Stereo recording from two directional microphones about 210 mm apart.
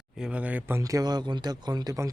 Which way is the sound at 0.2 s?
5° right (ahead or behind).